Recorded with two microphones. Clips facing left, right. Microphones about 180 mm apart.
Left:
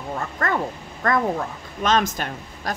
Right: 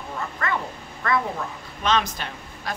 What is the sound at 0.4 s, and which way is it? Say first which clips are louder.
Dog: left 3 dB; 45° left (ahead or behind).